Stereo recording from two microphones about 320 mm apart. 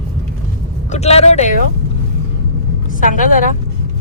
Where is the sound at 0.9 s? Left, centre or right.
Left.